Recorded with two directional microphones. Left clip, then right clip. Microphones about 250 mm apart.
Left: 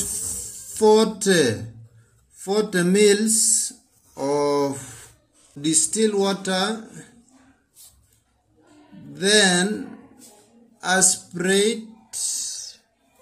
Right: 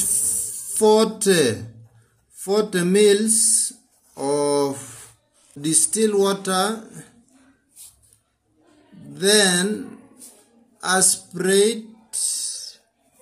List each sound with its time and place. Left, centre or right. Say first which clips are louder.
0.1 s music: right 5 dB; centre
2.3 s speech: right 1 dB; centre
9.1 s speech: even; centre